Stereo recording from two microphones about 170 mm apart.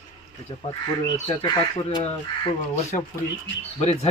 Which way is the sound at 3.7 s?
40° left (ahead or behind).